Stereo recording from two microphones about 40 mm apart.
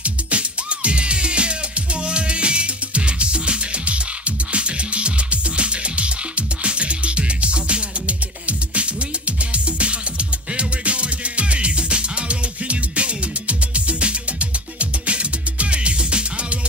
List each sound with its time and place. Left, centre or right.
0.0 s music: right